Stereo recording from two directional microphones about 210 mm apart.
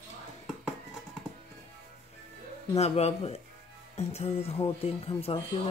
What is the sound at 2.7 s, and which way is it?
A man's voice, 30° left (ahead or behind).